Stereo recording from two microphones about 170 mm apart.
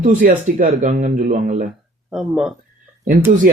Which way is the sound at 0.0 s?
50° right (ahead or behind).